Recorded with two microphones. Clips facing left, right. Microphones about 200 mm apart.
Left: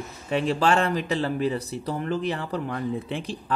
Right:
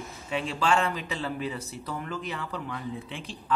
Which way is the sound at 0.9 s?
40° left (ahead or behind).